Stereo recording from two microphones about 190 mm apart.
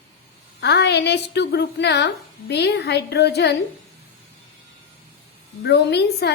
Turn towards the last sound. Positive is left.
turn(degrees=60)  # may be behind; listen again after turning